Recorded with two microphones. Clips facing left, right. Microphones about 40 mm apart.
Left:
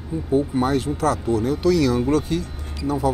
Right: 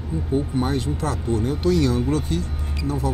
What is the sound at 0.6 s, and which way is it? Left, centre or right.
Speech, left.